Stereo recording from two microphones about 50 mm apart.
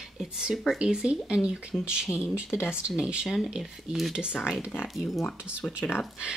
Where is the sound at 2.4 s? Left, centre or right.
Left.